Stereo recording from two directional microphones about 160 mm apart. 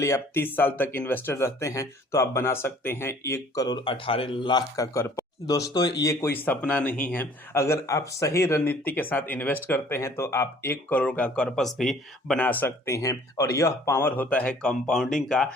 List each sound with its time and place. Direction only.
0.0 s speech: 15° left (ahead or behind)